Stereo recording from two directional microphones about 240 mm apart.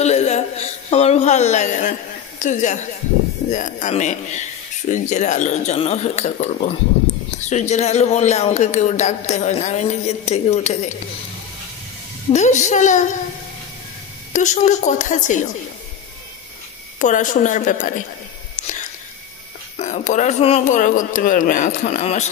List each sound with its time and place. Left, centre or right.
0.0 s a sound: left
3.4 s speech: left
12.3 s speech: left
14.3 s speech: left
17.0 s speech: left
19.8 s speech: left